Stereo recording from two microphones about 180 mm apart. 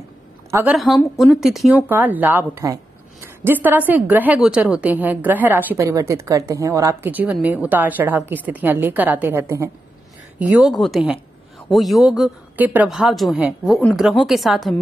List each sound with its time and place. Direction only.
0.5 s a woman's voice: 10° right (ahead or behind)
0.7 s a woman's voice: centre (ahead or behind); by 9.7 s 15° right (ahead or behind)
10.4 s speech: 5° right (ahead or behind)